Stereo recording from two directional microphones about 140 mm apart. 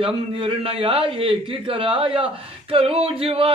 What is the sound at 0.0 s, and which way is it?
A man's voice, 40° right (ahead or behind).